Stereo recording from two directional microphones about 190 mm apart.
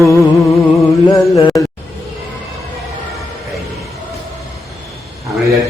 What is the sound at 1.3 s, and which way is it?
Speech, 15° left (ahead or behind).